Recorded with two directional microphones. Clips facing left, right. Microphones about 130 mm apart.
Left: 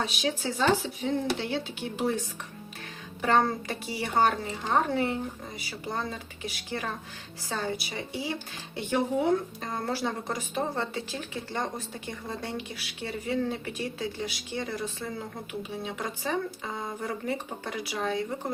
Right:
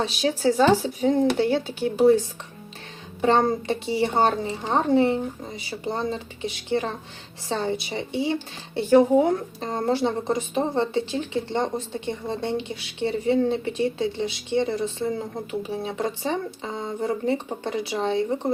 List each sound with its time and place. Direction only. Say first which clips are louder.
0.0 s speech: right 8 dB; 30° right (ahead or behind)
3.2 s speech: right 5 dB; 25° right (ahead or behind)